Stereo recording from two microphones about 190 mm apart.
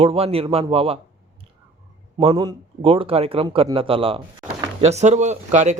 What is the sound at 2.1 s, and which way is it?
Speech, 25° right (ahead or behind).